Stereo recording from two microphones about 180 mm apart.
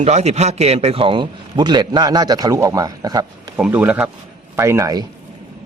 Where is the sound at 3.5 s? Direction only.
10° right (ahead or behind).